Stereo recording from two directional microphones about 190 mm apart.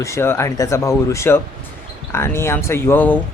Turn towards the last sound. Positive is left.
turn(degrees=10)  # may be behind; listen again after turning